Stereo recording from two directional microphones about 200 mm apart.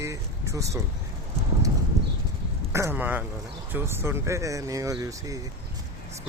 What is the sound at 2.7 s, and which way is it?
Speech, 15° right (ahead or behind).